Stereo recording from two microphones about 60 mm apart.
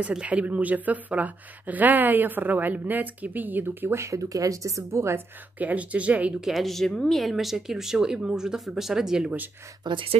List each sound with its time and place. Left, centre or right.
0.1 s speech: centre; by 4.0 s right
4.0 s speech: right
5.6 s speech: right
6.4 s speech: centre